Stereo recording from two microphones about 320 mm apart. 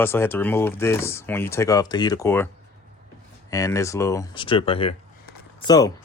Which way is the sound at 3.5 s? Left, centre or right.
Centre.